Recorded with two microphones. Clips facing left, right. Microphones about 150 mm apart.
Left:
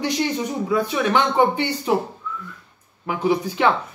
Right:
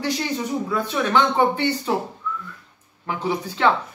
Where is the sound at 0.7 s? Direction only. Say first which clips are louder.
Left 2 dB; 15° left (ahead or behind).